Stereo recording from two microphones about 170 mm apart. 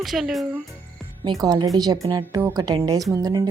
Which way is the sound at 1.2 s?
25° right (ahead or behind).